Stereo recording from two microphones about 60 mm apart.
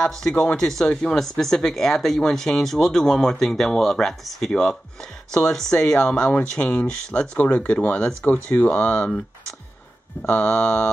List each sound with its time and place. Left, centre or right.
0.0 s speech: centre
8.3 s speech: left
10.2 s mantra: left